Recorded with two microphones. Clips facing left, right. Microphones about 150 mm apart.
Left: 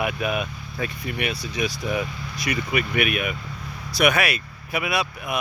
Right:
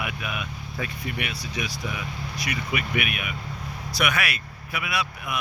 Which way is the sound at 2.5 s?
35° left (ahead or behind).